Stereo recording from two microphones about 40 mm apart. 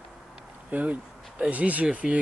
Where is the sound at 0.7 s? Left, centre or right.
Right.